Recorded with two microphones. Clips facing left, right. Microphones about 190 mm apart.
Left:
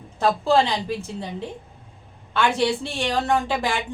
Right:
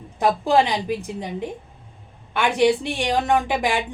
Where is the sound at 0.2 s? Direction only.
15° right (ahead or behind).